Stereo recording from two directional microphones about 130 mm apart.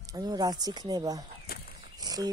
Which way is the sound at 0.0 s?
30° right (ahead or behind).